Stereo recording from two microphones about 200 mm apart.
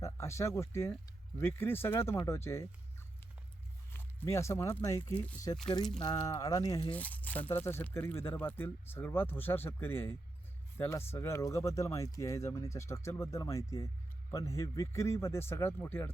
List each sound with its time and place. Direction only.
0.0 s speech: 15° left (ahead or behind)
3.9 s speech: 10° left (ahead or behind)
6.9 s speech: 10° left (ahead or behind)